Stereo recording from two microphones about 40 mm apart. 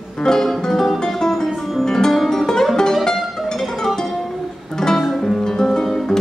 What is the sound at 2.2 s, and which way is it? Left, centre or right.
Music, centre.